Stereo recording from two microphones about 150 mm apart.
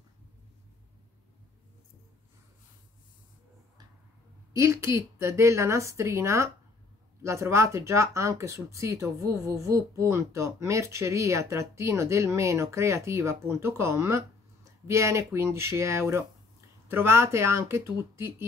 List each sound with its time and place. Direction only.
4.6 s speech: 20° right (ahead or behind)